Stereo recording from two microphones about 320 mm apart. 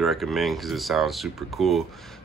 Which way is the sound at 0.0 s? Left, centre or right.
Centre.